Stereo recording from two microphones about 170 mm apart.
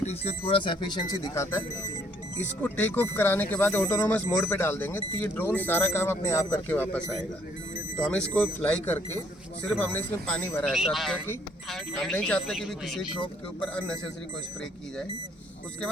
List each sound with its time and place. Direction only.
0.0 s speech: 35° left (ahead or behind); by 13.9 s 5° left (ahead or behind)